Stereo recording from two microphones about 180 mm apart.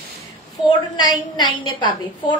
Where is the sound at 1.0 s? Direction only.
25° left (ahead or behind).